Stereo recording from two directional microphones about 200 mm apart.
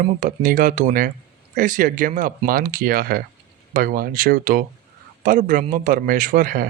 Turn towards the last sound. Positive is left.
turn(degrees=-45)  # may be behind; listen again after turning